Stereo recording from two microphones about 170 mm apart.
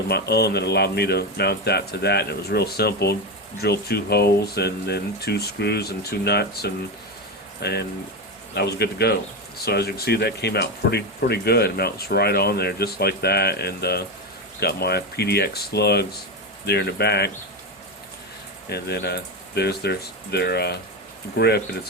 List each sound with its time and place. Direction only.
0.1 s speech: 70° left (ahead or behind)
18.7 s speech: 70° left (ahead or behind)